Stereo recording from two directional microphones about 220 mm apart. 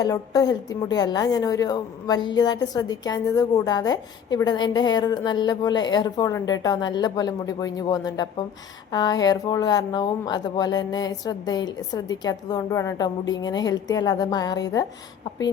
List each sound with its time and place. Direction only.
0.0 s a woman's voice: 15° left (ahead or behind)